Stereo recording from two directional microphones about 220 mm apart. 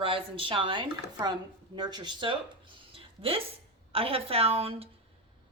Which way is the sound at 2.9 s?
25° right (ahead or behind).